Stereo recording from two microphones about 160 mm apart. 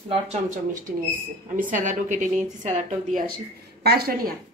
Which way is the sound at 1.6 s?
55° right (ahead or behind).